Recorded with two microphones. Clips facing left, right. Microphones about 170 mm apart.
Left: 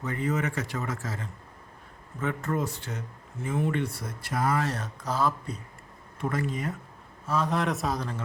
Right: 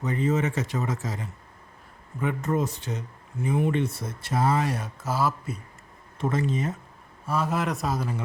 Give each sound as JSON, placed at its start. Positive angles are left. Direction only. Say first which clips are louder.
{"t": 0.0, "sound": "speech", "louder": "right 4 dB", "side_deg": -20}
{"t": 4.6, "sound": "speech", "louder": "right 2 dB", "side_deg": -10}
{"t": 6.1, "sound": "speech", "louder": "right 4 dB", "side_deg": -25}
{"t": 7.3, "sound": "a man's voice", "louder": "even", "side_deg": -5}